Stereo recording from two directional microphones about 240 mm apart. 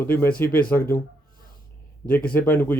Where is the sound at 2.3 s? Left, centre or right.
Centre.